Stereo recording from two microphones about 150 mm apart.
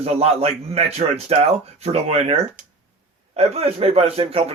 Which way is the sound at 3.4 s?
45° right (ahead or behind).